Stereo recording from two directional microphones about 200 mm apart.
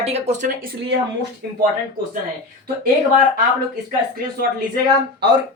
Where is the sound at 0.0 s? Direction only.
35° right (ahead or behind).